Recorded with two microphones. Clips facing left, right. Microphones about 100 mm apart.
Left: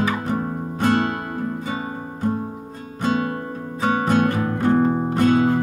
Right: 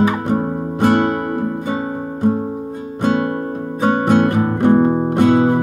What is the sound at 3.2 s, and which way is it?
Music, 40° right (ahead or behind).